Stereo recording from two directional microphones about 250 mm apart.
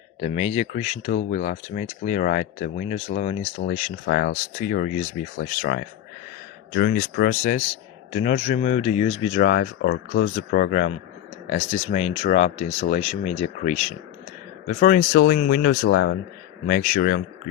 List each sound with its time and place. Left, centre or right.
0.2 s speech: left
14.8 s speech: left